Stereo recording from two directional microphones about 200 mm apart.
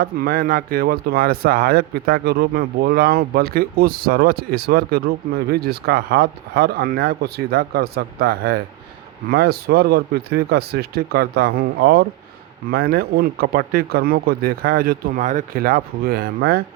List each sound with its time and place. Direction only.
0.0 s a man's voice: 50° right (ahead or behind)